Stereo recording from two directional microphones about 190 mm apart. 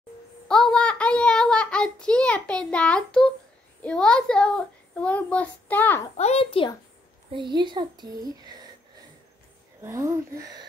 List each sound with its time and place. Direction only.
0.5 s a sound: 5° left (ahead or behind)
3.8 s a child's voice: 5° left (ahead or behind)
6.1 s a child's voice: 35° left (ahead or behind)
7.3 s speech: 25° right (ahead or behind)
9.8 s speech: 15° right (ahead or behind)